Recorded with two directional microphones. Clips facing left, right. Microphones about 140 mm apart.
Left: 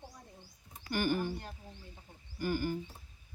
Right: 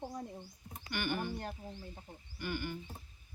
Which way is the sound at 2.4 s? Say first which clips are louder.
Left 6 dB; 40° left (ahead or behind).